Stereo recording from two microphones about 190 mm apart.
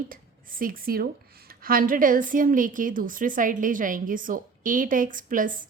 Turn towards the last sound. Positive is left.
turn(degrees=-45)  # may be behind; listen again after turning